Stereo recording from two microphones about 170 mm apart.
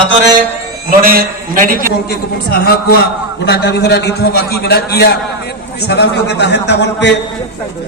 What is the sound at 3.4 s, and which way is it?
A man's voice, 80° left.